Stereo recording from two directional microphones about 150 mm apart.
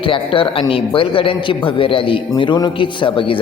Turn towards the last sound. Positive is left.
turn(degrees=35)  # may be behind; listen again after turning